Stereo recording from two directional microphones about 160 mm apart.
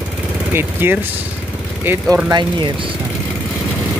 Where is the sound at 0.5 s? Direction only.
15° right (ahead or behind).